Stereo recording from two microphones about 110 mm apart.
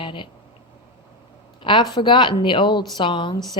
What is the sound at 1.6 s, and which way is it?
A woman's voice, 50° left (ahead or behind).